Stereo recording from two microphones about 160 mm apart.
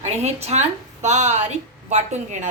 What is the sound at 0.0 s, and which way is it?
A woman's voice, 40° right (ahead or behind).